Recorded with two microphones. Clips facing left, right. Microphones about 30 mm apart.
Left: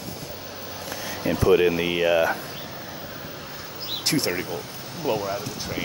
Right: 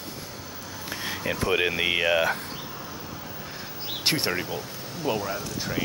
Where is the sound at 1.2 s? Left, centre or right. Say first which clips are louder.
Left 6 dB; right.